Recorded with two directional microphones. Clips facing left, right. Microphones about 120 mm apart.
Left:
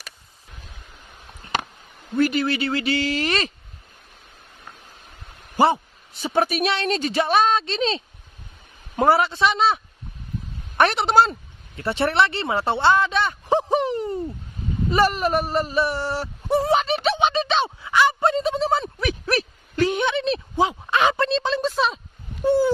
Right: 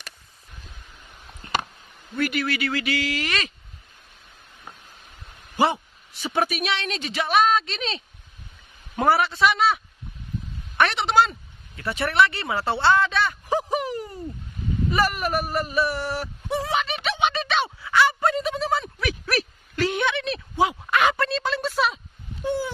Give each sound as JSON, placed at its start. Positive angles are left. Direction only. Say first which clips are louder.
{"t": 2.1, "sound": "speech", "louder": "left 5 dB", "side_deg": 30}
{"t": 6.3, "sound": "speech", "louder": "left 4 dB", "side_deg": 35}
{"t": 10.8, "sound": "speech", "louder": "left 3 dB", "side_deg": 40}